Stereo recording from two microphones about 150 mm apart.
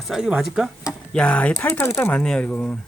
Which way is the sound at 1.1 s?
10° left (ahead or behind).